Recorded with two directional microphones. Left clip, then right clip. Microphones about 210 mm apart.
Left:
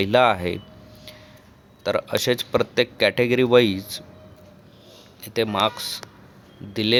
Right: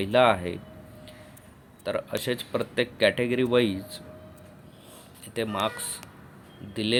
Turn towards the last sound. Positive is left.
turn(degrees=15)  # may be behind; listen again after turning